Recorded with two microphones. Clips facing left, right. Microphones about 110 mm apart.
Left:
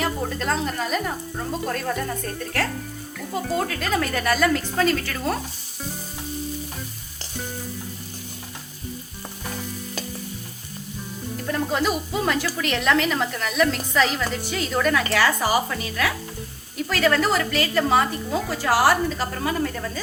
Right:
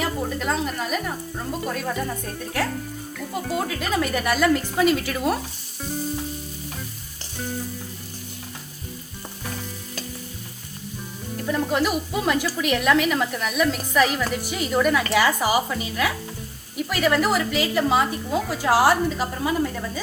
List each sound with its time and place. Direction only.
0.0 s music: 10° right (ahead or behind)
1.6 s a woman's voice: 5° right (ahead or behind)
11.4 s a woman's voice: 5° right (ahead or behind)